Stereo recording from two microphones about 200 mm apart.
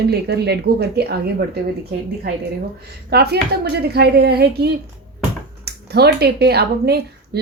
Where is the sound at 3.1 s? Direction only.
55° right (ahead or behind).